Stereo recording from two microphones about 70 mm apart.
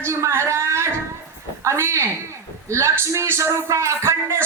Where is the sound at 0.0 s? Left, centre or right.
Right.